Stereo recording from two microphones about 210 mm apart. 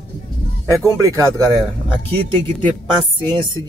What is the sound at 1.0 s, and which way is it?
Speech, 15° right (ahead or behind).